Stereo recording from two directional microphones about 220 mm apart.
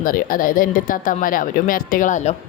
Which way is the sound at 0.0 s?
40° left (ahead or behind).